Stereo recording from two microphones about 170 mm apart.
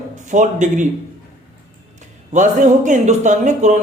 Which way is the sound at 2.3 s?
45° right (ahead or behind).